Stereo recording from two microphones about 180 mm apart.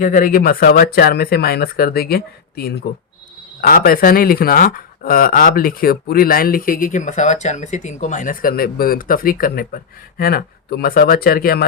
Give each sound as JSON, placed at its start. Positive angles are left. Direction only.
{"t": 0.0, "sound": "speech", "side_deg": 45}